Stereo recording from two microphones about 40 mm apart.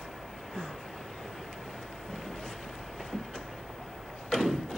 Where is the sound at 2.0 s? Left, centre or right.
Centre.